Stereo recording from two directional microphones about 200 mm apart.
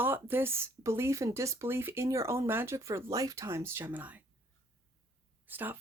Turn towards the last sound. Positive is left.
turn(degrees=-10)  # may be behind; listen again after turning